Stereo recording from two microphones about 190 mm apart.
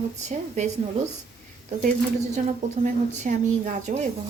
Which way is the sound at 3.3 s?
40° right (ahead or behind).